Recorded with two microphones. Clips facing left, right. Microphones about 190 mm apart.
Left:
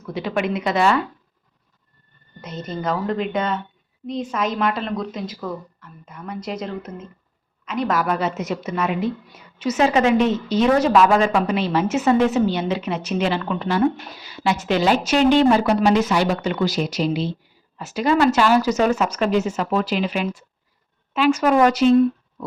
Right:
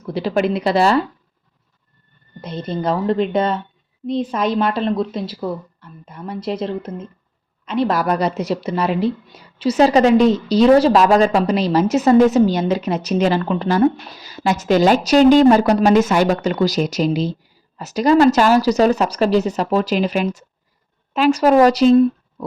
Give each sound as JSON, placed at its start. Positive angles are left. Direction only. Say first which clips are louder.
{"t": 0.0, "sound": "a woman's voice", "louder": "right 5 dB", "side_deg": -35}
{"t": 2.4, "sound": "a woman's voice", "louder": "right 4 dB", "side_deg": -30}